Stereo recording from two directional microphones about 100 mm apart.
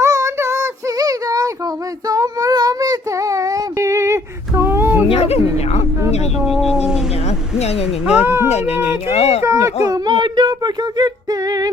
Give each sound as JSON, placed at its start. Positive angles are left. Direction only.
{"t": 0.0, "sound": "child singing", "side_deg": -30}
{"t": 5.0, "sound": "speech", "side_deg": 85}
{"t": 6.3, "sound": "speech", "side_deg": 0}
{"t": 7.3, "sound": "speech", "side_deg": 90}
{"t": 8.0, "sound": "speech", "side_deg": -15}
{"t": 9.0, "sound": "speech", "side_deg": 90}
{"t": 9.4, "sound": "speech", "side_deg": -30}
{"t": 10.1, "sound": "a sound", "side_deg": -50}